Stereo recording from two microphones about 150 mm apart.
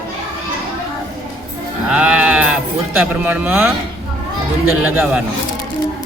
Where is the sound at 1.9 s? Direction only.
5° right (ahead or behind).